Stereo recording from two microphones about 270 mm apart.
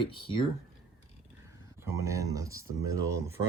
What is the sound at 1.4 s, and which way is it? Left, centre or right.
Speech, centre.